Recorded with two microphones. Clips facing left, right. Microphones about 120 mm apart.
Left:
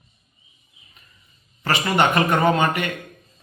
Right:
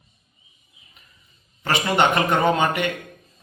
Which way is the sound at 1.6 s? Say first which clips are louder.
Even; 20° right (ahead or behind).